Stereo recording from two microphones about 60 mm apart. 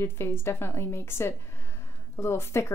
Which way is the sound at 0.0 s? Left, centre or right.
Left.